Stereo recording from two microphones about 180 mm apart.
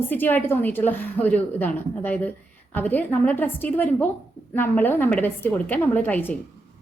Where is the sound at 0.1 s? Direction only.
10° left (ahead or behind).